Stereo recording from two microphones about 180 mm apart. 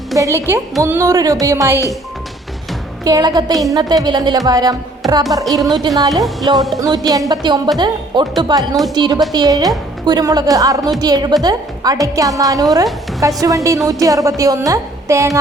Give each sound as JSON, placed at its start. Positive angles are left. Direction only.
{"t": 0.2, "sound": "a woman's voice", "side_deg": -15}
{"t": 3.0, "sound": "speech", "side_deg": -20}